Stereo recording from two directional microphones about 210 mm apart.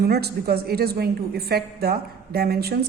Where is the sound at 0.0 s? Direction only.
50° right (ahead or behind).